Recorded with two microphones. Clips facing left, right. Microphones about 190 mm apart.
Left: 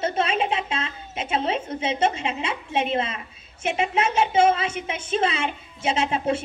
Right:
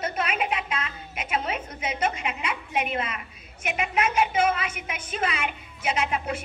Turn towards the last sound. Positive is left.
turn(degrees=30)  # may be behind; listen again after turning